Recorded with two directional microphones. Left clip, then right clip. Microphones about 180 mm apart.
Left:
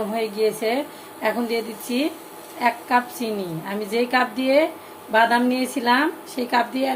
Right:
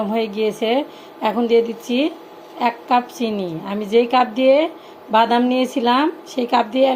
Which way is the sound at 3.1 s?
Centre (ahead or behind).